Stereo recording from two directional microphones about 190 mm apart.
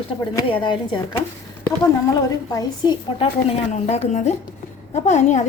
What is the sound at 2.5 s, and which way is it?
Speech, 25° left (ahead or behind).